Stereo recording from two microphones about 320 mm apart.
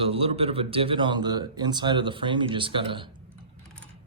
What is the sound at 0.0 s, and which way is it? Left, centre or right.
Speech, centre.